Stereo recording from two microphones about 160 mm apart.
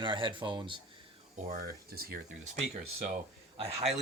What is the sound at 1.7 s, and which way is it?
Speech, 70° right (ahead or behind).